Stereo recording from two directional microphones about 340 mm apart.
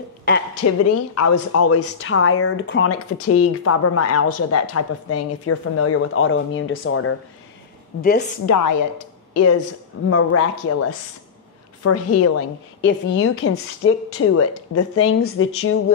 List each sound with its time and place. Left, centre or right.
0.7 s a woman's voice: left
8.5 s a woman's voice: left
9.3 s a woman's voice: left